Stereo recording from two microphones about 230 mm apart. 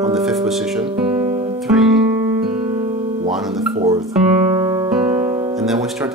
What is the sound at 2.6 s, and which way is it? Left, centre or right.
Music, centre.